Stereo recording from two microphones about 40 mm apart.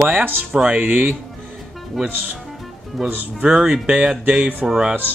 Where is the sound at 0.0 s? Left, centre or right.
Right.